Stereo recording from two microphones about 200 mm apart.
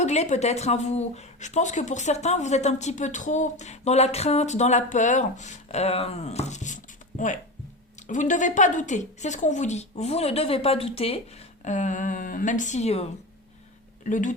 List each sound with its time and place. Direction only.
0.0 s speech: 35° left (ahead or behind)